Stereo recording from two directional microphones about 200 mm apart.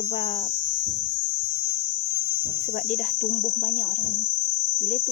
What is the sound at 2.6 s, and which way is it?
Cricket, 45° left (ahead or behind).